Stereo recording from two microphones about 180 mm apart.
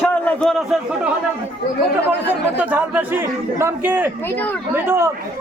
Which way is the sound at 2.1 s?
10° right (ahead or behind).